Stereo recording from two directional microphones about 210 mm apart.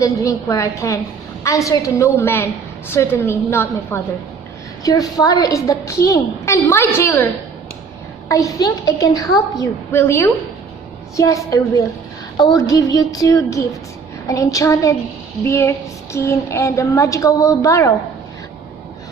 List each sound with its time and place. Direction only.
0.0 s a woman's voice: 15° left (ahead or behind)
8.3 s a woman's voice: 15° left (ahead or behind)